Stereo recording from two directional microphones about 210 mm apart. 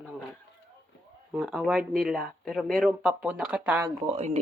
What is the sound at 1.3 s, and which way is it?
Speech, 5° right (ahead or behind).